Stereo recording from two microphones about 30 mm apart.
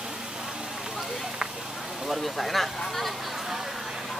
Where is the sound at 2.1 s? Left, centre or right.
Centre.